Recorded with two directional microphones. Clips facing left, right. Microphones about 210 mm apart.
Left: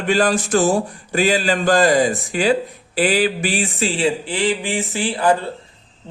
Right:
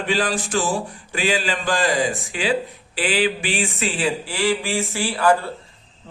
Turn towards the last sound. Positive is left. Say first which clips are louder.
# left 1 dB
turn(degrees=20)  # may be behind; listen again after turning